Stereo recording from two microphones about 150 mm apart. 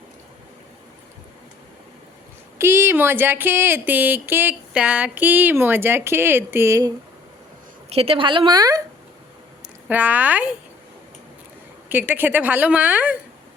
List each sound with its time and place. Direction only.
2.6 s speech: 15° right (ahead or behind)
7.9 s a woman's voice: 40° right (ahead or behind); by 8.8 s 25° right (ahead or behind)
9.9 s speech: 10° right (ahead or behind)
11.9 s speech: 10° right (ahead or behind)